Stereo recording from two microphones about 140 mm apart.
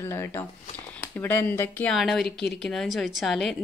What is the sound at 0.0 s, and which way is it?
Speech, 15° left (ahead or behind).